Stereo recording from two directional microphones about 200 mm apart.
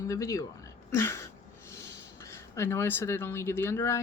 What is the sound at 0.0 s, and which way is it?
Speech, 15° left (ahead or behind).